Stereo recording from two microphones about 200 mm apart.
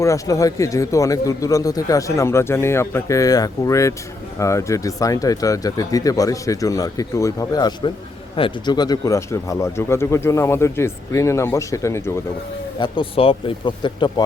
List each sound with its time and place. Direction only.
0.0 s speech: 15° left (ahead or behind)
12.8 s speech: 25° left (ahead or behind)